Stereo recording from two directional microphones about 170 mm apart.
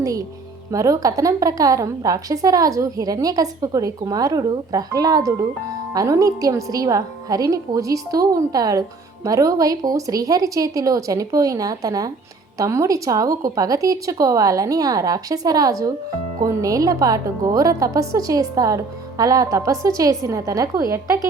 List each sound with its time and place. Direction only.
0.0 s music: 20° right (ahead or behind)
0.7 s a woman's voice: 20° right (ahead or behind)